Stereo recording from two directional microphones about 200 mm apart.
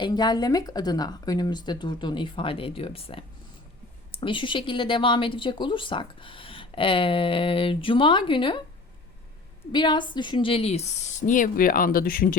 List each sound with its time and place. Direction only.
0.0 s speech: 20° left (ahead or behind)
9.7 s a woman's voice: 25° left (ahead or behind); by 12.4 s 45° left (ahead or behind)